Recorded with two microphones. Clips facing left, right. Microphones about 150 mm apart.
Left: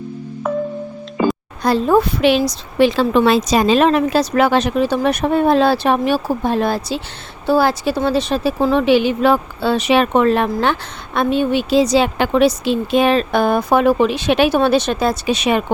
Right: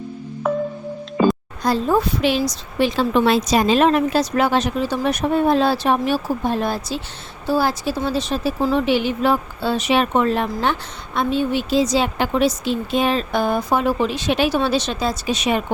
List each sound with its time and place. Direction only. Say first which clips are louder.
0.4 s music: left 1 dB; centre (ahead or behind)
1.6 s a woman's voice: left 4 dB; 65° left (ahead or behind)
7.4 s a woman's voice: left 5 dB; 65° left (ahead or behind)